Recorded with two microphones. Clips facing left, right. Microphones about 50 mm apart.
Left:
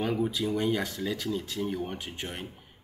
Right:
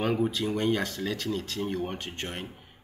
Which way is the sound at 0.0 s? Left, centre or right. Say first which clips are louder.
Right 2 dB; right.